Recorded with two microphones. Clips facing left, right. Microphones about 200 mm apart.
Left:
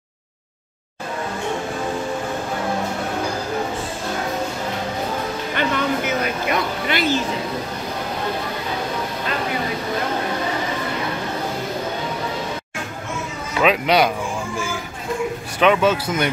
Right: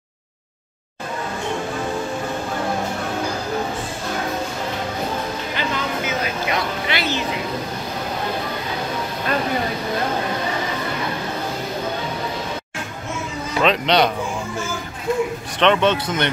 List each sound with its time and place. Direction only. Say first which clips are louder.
5.6 s music: left 5 dB; 55° left (ahead or behind)
13.6 s speech: left 1 dB; 5° left (ahead or behind)
15.6 s speech: even; 5° left (ahead or behind)